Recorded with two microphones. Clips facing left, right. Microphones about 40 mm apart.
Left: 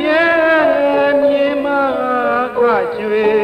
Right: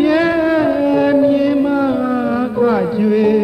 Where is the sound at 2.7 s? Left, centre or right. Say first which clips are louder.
Even; left.